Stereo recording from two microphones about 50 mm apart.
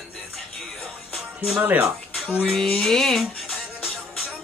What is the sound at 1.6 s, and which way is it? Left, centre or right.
Speech, right.